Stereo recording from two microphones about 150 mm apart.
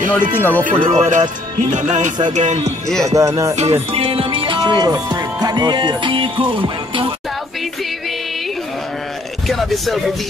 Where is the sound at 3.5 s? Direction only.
45° right (ahead or behind).